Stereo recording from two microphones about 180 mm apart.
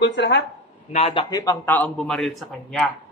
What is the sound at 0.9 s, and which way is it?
Speech, 30° left (ahead or behind).